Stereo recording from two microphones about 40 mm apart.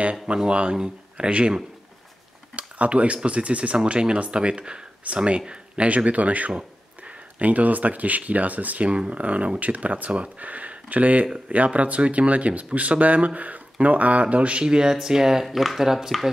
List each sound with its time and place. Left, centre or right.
0.0 s speech: right
15.4 s speech: centre